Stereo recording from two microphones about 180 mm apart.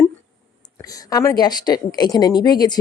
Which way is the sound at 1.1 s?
20° left (ahead or behind).